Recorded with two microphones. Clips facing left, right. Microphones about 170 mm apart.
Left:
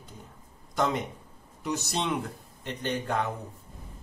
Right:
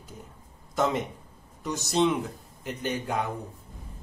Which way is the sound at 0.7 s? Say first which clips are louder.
Right 2 dB; centre (ahead or behind).